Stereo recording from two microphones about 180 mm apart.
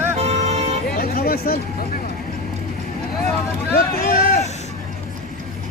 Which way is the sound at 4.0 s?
55° left (ahead or behind).